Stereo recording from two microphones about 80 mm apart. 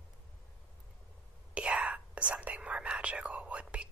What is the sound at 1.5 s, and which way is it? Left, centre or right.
Whispering, centre.